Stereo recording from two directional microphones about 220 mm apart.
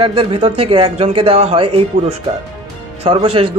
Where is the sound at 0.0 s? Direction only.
25° right (ahead or behind).